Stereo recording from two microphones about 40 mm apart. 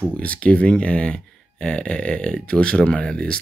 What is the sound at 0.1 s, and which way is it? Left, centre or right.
Speech, left.